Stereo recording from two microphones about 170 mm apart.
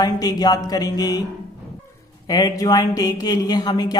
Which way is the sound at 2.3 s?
25° left (ahead or behind).